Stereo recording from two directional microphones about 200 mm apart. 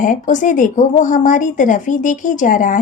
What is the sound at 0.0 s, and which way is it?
Speech, 40° left (ahead or behind).